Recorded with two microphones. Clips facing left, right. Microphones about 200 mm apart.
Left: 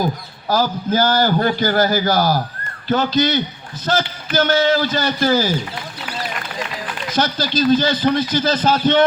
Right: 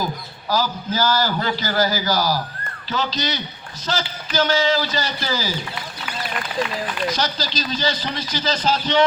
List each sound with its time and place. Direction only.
0.0 s a man's voice: 50° left (ahead or behind)
7.1 s a man's voice: 55° left (ahead or behind)